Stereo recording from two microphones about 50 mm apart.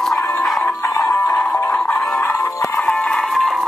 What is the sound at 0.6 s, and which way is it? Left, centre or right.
Music, left.